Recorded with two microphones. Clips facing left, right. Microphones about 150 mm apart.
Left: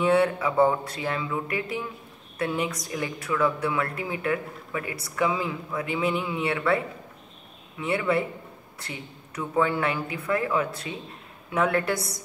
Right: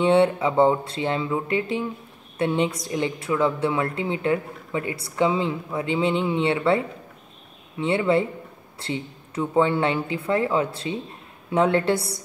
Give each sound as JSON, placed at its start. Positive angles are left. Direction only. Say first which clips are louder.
{"t": 0.0, "sound": "a woman's voice", "louder": "right 3 dB", "side_deg": -25}
{"t": 7.8, "sound": "a woman's voice", "louder": "right 4 dB", "side_deg": -25}